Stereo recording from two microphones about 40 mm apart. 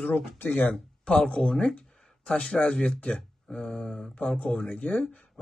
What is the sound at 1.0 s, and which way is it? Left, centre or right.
Speech, left.